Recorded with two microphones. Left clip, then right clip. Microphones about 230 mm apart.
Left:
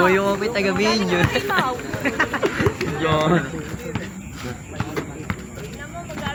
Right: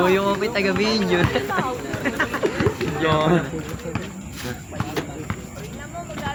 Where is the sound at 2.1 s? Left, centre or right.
Left.